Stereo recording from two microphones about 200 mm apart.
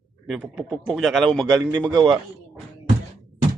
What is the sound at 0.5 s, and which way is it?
Speech, centre (ahead or behind).